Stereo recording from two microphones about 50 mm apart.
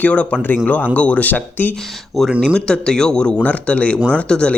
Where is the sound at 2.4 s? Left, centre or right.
Centre.